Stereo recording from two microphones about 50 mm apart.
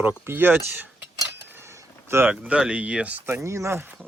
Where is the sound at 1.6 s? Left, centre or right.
Right.